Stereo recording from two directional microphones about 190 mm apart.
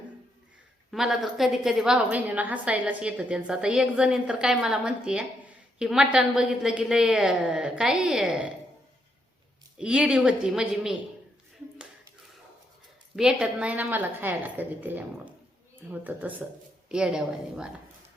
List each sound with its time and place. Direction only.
0.9 s a woman's voice: centre (ahead or behind)
9.7 s a woman's voice: 5° right (ahead or behind)
13.1 s a woman's voice: 5° right (ahead or behind)